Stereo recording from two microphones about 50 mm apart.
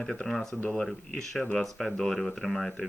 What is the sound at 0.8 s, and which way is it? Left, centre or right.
Speech, centre.